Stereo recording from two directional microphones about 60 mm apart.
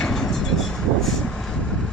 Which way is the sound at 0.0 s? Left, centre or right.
Centre.